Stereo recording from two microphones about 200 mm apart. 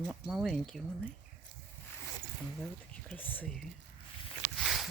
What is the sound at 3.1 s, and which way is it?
Speech, 10° left (ahead or behind).